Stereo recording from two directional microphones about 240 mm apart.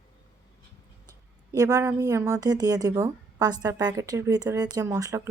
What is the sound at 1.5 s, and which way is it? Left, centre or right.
A woman's voice, centre.